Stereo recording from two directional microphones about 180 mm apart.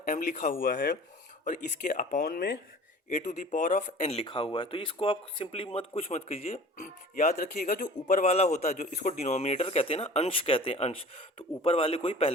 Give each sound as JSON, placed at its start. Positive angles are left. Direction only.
{"t": 0.0, "sound": "speech", "side_deg": 50}
{"t": 3.1, "sound": "a man's voice", "side_deg": 40}
{"t": 7.3, "sound": "a man's voice", "side_deg": 55}